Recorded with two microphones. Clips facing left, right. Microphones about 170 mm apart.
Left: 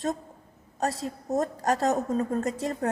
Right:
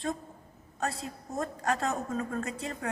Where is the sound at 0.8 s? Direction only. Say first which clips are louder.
Left 5 dB; 40° left (ahead or behind).